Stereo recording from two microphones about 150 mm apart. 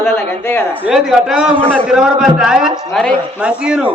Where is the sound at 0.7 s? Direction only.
5° right (ahead or behind).